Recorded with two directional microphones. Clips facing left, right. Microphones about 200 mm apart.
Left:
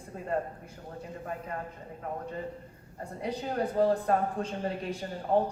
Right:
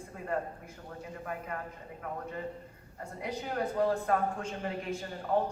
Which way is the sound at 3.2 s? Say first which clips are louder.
Left 3 dB; 30° left (ahead or behind).